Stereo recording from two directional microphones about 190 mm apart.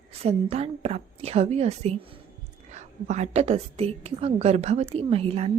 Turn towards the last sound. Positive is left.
turn(degrees=-30)  # may be behind; listen again after turning